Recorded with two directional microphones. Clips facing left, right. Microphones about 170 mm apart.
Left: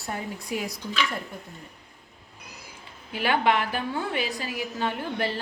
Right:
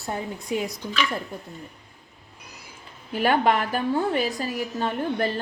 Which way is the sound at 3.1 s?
45° right (ahead or behind).